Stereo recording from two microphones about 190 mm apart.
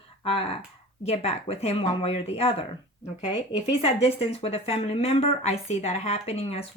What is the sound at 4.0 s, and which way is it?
A woman's voice, 30° left (ahead or behind).